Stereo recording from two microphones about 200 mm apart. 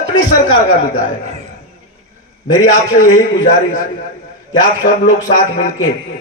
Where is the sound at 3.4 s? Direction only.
40° left (ahead or behind).